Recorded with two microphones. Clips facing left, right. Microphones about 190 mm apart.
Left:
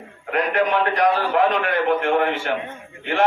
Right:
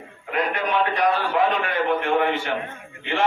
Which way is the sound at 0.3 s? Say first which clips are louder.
Left 4 dB; 45° left (ahead or behind).